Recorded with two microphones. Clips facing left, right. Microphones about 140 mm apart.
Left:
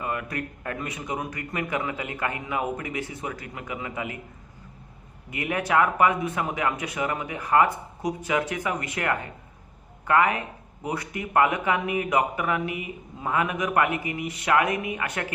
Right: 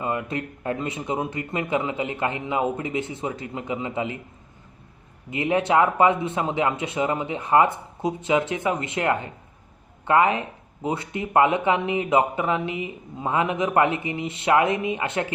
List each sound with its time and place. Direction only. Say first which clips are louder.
0.0 s speech: right 3 dB; 25° right (ahead or behind)
5.3 s speech: right 4 dB; 25° right (ahead or behind)